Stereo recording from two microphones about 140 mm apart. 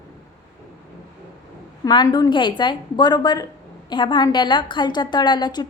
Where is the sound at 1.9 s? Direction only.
30° left (ahead or behind).